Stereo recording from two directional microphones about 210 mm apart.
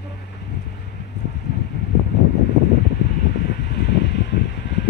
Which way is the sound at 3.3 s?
50° left (ahead or behind).